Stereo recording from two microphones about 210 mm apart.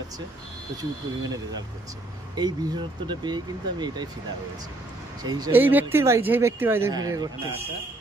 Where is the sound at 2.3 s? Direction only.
20° right (ahead or behind).